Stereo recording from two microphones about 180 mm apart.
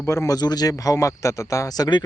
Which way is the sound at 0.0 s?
15° left (ahead or behind).